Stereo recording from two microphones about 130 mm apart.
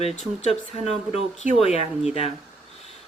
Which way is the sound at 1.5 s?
50° left (ahead or behind).